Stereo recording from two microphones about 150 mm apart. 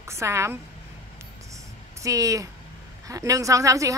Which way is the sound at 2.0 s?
20° right (ahead or behind).